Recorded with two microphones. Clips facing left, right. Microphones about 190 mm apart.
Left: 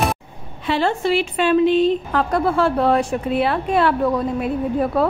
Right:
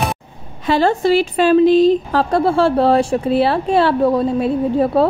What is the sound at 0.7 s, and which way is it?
A woman's voice, 40° right (ahead or behind).